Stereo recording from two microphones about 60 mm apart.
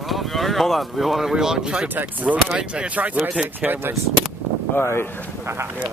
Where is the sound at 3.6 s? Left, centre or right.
Right.